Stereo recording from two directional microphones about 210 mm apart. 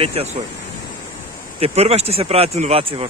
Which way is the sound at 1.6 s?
30° right (ahead or behind).